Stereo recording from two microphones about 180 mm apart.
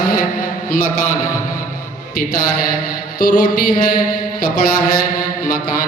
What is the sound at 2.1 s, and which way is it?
Speech, 55° left (ahead or behind).